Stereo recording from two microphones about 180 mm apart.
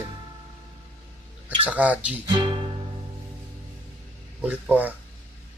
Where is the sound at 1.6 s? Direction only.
10° right (ahead or behind).